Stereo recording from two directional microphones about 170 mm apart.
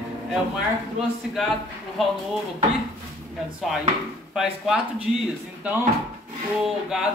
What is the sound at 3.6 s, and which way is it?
Speech, centre (ahead or behind).